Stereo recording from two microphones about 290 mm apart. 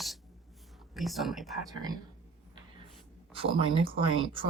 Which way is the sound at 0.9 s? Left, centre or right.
Centre.